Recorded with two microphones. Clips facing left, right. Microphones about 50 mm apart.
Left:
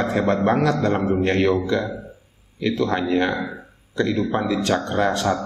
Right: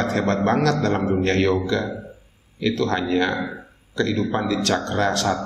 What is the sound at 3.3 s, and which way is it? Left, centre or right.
A man's voice, centre.